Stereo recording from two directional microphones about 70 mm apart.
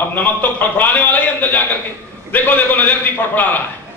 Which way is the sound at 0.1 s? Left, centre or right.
Left.